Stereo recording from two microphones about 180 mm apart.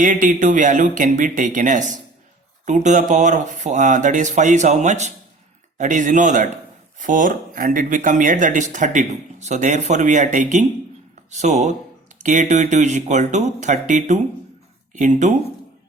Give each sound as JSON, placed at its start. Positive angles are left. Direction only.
{"t": 0.0, "sound": "speech", "side_deg": -45}